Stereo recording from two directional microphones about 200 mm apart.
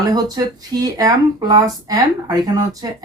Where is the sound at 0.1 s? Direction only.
20° right (ahead or behind).